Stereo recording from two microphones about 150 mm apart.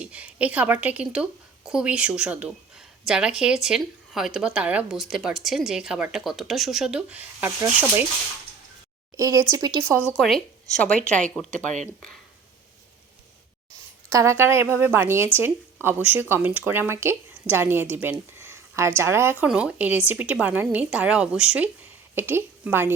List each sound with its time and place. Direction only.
0.0 s a woman's voice: 10° right (ahead or behind)
9.1 s speech: 20° right (ahead or behind)
10.2 s speech: centre (ahead or behind)
11.6 s speech: 55° right (ahead or behind)
14.1 s a woman's voice: 20° right (ahead or behind)